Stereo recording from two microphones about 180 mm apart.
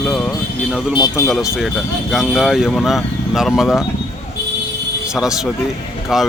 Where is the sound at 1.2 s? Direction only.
Centre (ahead or behind).